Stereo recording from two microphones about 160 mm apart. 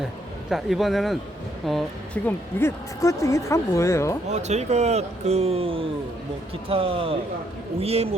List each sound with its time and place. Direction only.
0.5 s speech: centre (ahead or behind)
2.2 s speech: 15° left (ahead or behind)
4.3 s speech: 45° right (ahead or behind)